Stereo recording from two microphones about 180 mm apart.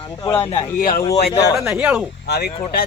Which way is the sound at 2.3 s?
65° left (ahead or behind).